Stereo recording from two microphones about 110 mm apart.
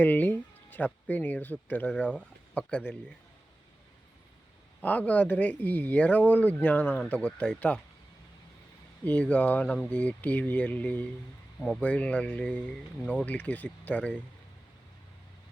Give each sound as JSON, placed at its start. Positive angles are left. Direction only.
{"t": 0.0, "sound": "speech", "side_deg": 15}
{"t": 4.8, "sound": "speech", "side_deg": 15}
{"t": 9.0, "sound": "speech", "side_deg": 10}